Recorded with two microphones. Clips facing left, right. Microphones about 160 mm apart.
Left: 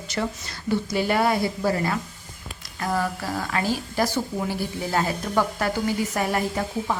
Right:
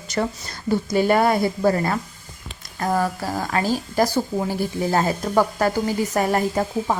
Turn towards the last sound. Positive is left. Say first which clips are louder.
# right 4 dB
turn(degrees=-40)  # may be behind; listen again after turning